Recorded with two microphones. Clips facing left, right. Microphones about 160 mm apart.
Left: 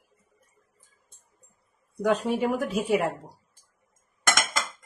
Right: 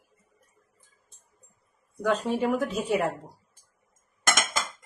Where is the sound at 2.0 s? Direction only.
15° left (ahead or behind).